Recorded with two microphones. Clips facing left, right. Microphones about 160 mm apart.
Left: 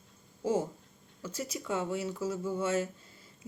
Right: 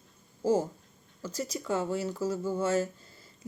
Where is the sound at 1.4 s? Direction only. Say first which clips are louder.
Right 3 dB; 5° left (ahead or behind).